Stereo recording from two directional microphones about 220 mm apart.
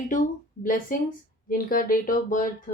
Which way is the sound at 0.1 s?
35° left (ahead or behind).